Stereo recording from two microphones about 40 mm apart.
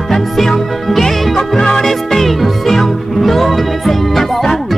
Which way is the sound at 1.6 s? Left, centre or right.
Centre.